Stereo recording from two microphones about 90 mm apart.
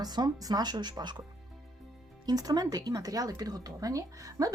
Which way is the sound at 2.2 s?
45° right (ahead or behind).